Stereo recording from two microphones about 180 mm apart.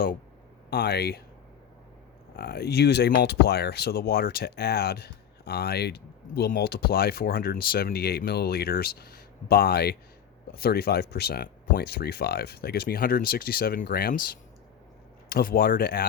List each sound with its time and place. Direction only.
0.7 s speech: 65° left (ahead or behind)
2.3 s speech: 60° left (ahead or behind)